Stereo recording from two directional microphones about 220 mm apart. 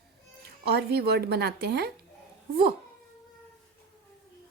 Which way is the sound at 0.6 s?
45° right (ahead or behind).